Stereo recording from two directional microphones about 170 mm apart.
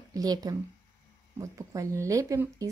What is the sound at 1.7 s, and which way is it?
Speech, 15° right (ahead or behind).